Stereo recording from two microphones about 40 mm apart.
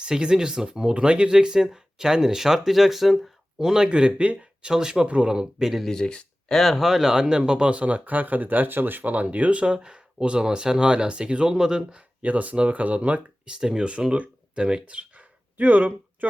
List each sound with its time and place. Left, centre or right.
0.0 s speech: right; by 3.2 s centre
3.6 s speech: centre
3.8 s speech: right
4.7 s speech: centre
5.0 s speech: right
5.3 s speech: centre
5.9 s speech: left
6.5 s speech: centre
6.7 s speech: centre
12.2 s speech: right
15.5 s speech: right